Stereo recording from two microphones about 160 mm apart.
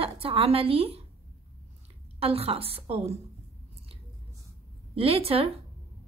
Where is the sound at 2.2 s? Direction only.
40° right (ahead or behind).